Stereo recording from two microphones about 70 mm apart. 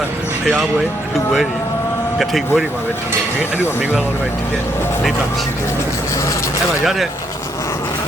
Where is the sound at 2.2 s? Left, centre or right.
Centre.